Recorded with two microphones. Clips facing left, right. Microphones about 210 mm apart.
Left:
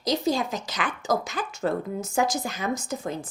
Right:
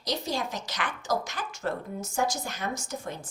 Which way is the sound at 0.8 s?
90° left.